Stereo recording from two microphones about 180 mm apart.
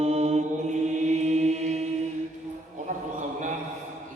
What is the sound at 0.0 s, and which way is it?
Mantra, 40° right (ahead or behind).